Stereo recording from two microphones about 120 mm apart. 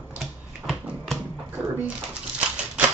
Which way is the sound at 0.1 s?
Centre (ahead or behind).